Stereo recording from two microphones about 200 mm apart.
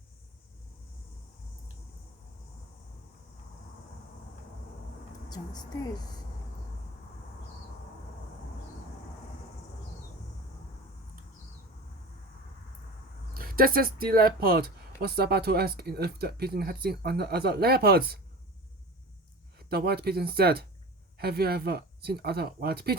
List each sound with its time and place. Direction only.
13.3 s speech: 45° right (ahead or behind)
19.5 s speech: 50° right (ahead or behind)